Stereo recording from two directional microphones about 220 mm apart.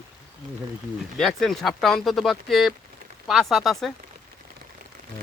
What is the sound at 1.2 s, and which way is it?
Speech, centre (ahead or behind).